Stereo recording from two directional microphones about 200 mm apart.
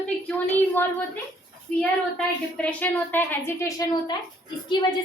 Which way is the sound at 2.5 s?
5° left (ahead or behind).